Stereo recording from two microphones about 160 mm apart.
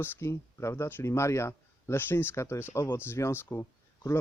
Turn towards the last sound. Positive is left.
turn(degrees=15)  # may be behind; listen again after turning